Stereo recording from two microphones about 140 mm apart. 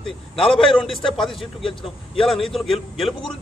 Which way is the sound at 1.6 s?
40° left (ahead or behind).